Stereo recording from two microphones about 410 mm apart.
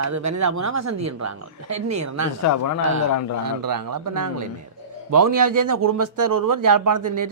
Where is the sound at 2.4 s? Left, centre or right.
Left.